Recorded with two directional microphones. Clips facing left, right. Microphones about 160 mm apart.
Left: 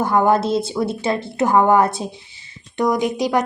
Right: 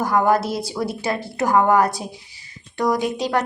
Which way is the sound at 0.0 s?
25° left (ahead or behind).